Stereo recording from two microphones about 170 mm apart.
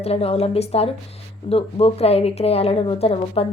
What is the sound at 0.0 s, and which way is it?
Speech, 35° left (ahead or behind).